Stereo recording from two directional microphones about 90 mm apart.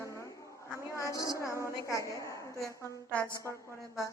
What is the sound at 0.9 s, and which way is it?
A woman's voice, 35° left (ahead or behind).